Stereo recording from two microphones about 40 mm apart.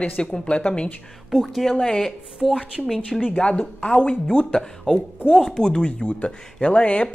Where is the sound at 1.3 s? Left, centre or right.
Centre.